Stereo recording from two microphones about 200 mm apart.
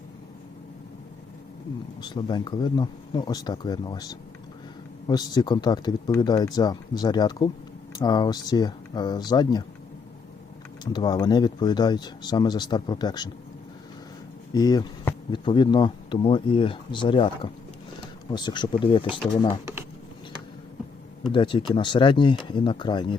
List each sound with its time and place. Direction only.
2.0 s speech: 20° left (ahead or behind)
10.9 s speech: 20° left (ahead or behind)
14.5 s speech: 20° left (ahead or behind)
21.3 s speech: 25° left (ahead or behind)